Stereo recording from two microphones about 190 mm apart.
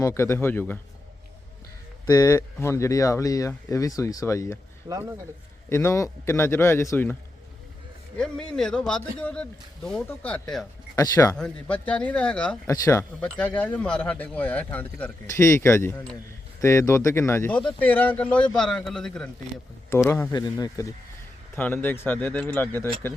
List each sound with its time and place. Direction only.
0.0 s a man's voice: 15° left (ahead or behind)
2.0 s a man's voice: 15° left (ahead or behind)
4.9 s speech: 15° right (ahead or behind)
5.6 s a man's voice: 15° left (ahead or behind)
8.2 s speech: 5° left (ahead or behind)
10.9 s a man's voice: 20° left (ahead or behind)
11.3 s speech: 5° left (ahead or behind)
12.6 s a man's voice: 15° left (ahead or behind)
19.9 s a man's voice: 15° left (ahead or behind)